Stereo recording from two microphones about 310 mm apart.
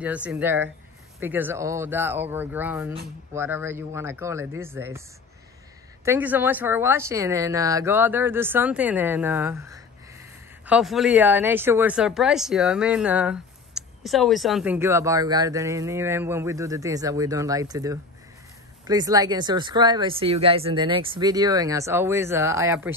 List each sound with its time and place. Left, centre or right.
0.0 s speech: centre
6.0 s speech: centre